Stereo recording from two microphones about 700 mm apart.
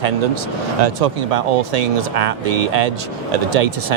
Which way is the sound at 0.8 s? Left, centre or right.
Right.